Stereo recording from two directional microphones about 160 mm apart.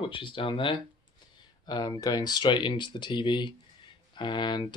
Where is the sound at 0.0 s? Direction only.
30° left (ahead or behind).